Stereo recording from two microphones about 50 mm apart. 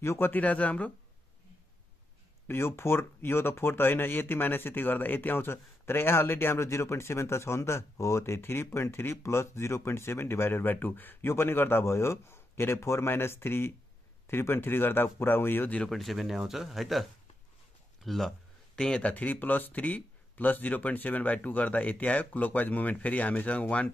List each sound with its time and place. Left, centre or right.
0.0 s speech: left
0.3 s speech: left
2.4 s speech: left
11.2 s speech: left
11.8 s speech: left
15.9 s speech: centre
18.8 s speech: centre
19.1 s speech: left